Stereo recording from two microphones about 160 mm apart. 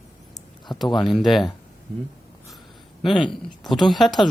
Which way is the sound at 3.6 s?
Centre (ahead or behind).